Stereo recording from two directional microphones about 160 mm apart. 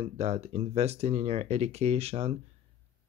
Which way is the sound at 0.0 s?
40° right (ahead or behind).